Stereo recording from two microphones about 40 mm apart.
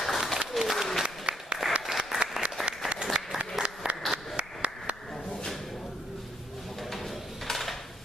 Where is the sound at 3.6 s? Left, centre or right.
Centre.